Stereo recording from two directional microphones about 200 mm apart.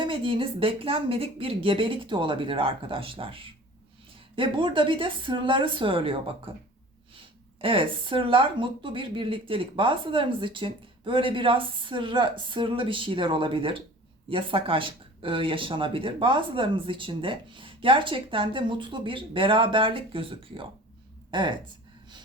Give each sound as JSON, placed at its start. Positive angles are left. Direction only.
{"t": 0.0, "sound": "speech", "side_deg": -25}
{"t": 7.6, "sound": "speech", "side_deg": -25}